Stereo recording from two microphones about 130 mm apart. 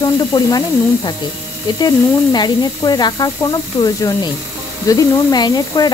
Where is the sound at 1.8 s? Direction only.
30° left (ahead or behind).